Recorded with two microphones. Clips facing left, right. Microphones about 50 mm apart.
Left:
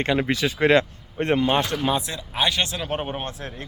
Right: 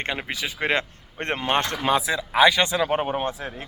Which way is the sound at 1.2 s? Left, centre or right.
Right.